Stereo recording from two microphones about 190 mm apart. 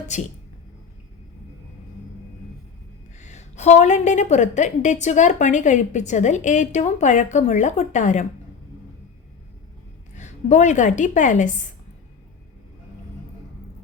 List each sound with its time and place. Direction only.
0.1 s a woman's voice: 40° left (ahead or behind)
3.2 s a woman's voice: 40° left (ahead or behind)
10.2 s a woman's voice: 40° left (ahead or behind)